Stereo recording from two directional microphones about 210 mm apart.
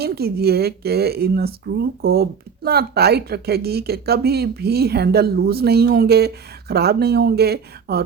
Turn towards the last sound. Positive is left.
turn(degrees=-50)  # may be behind; listen again after turning